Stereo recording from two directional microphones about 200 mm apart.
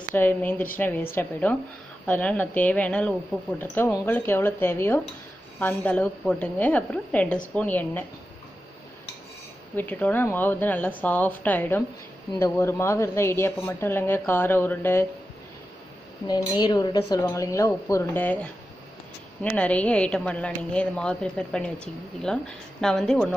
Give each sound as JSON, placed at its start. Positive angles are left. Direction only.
{"t": 0.1, "sound": "speech", "side_deg": 10}
{"t": 9.8, "sound": "speech", "side_deg": 10}
{"t": 16.3, "sound": "speech", "side_deg": 20}